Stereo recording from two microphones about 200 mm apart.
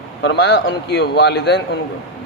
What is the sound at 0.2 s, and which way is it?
A man's voice, 60° left (ahead or behind).